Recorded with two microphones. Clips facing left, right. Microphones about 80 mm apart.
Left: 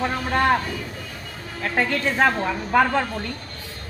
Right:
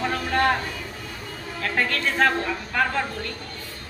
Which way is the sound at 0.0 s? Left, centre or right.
Centre.